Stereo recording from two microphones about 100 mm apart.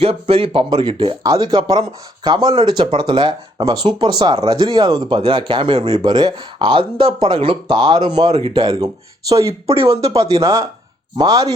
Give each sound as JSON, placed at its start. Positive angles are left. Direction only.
{"t": 0.0, "sound": "speech", "side_deg": -65}
{"t": 1.2, "sound": "speech", "side_deg": -40}
{"t": 4.4, "sound": "speech", "side_deg": -45}
{"t": 6.1, "sound": "speech", "side_deg": -45}
{"t": 8.3, "sound": "speech", "side_deg": -65}
{"t": 9.3, "sound": "speech", "side_deg": -30}
{"t": 9.6, "sound": "speech", "side_deg": -70}
{"t": 10.4, "sound": "speech", "side_deg": -30}
{"t": 11.2, "sound": "speech", "side_deg": -40}